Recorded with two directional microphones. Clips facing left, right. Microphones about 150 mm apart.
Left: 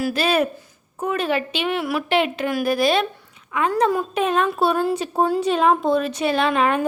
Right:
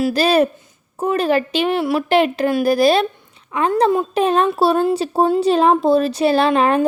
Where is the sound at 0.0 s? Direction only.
35° right (ahead or behind).